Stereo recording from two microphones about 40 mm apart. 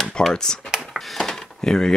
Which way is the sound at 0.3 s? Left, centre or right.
Centre.